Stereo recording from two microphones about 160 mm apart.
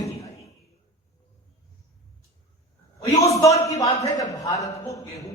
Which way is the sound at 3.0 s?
20° left (ahead or behind).